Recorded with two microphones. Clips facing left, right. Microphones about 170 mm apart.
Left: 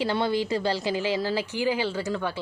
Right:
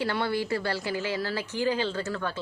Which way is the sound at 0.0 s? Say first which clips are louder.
Left 3 dB; 20° left (ahead or behind).